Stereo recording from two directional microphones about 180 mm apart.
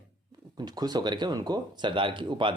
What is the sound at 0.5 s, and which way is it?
Speech, 20° right (ahead or behind).